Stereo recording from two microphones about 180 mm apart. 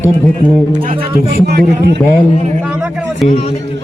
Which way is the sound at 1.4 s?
65° right (ahead or behind).